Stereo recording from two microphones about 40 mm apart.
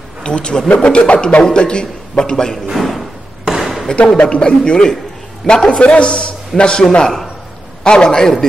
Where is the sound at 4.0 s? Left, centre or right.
Left.